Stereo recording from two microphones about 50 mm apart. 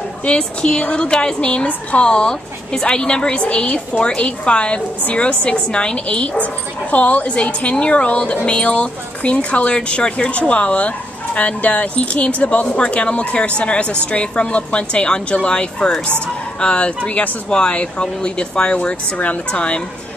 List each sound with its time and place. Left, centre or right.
0.2 s speech: left